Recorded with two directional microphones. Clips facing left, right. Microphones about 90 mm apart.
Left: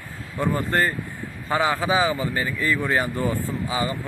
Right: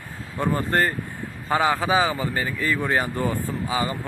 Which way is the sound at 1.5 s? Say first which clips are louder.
Right 1 dB; 35° right (ahead or behind).